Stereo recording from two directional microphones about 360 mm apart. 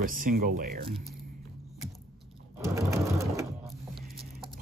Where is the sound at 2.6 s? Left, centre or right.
Centre.